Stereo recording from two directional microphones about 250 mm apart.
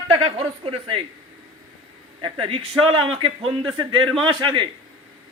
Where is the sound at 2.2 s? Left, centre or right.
Right.